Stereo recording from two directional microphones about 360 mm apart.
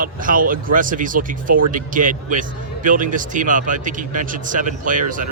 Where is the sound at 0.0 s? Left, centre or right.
Right.